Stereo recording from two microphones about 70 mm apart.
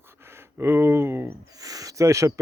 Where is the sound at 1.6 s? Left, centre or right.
Right.